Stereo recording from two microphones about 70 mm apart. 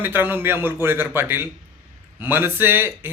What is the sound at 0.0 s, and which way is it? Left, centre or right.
A man's voice, right.